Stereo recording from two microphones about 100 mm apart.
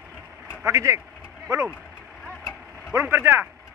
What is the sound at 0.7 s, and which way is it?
Speech, 30° right (ahead or behind).